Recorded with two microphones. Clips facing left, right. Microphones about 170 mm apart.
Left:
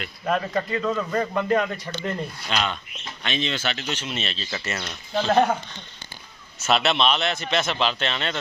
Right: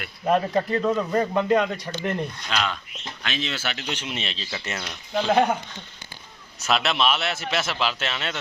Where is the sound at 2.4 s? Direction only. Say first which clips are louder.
Left 1 dB; centre (ahead or behind).